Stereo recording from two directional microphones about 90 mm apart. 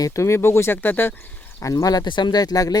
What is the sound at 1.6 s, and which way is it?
Speech, 40° left (ahead or behind).